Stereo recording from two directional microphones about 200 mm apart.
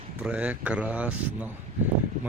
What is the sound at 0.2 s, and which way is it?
Speech, 5° right (ahead or behind).